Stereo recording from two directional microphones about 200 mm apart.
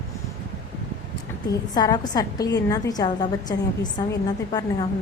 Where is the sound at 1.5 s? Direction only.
20° left (ahead or behind).